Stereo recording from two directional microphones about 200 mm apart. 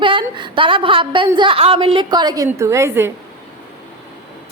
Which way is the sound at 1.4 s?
25° right (ahead or behind).